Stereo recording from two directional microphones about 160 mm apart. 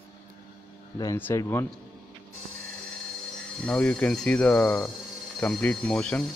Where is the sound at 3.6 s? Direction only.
5° left (ahead or behind).